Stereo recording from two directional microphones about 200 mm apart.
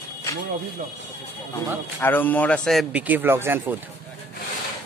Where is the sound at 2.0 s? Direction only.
10° left (ahead or behind); by 3.6 s 10° right (ahead or behind).